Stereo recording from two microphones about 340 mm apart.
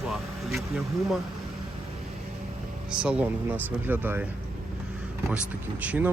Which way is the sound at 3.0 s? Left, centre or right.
Centre.